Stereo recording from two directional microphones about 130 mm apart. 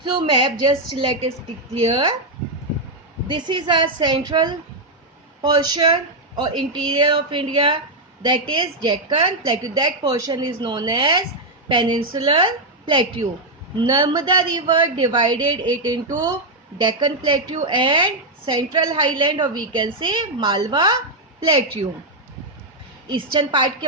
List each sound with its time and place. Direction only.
0.1 s a woman's voice: 40° right (ahead or behind)
3.2 s a woman's voice: 35° right (ahead or behind)
23.0 s a woman's voice: 40° right (ahead or behind)